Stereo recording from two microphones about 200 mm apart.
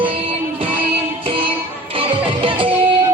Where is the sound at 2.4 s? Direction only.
25° right (ahead or behind).